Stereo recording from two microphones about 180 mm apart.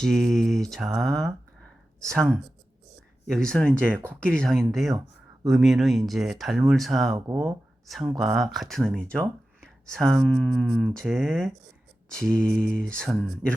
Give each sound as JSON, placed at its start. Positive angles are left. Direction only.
{"t": 0.0, "sound": "speech", "side_deg": 0}
{"t": 3.3, "sound": "speech", "side_deg": 5}
{"t": 7.3, "sound": "speech", "side_deg": -15}
{"t": 7.9, "sound": "speech", "side_deg": 0}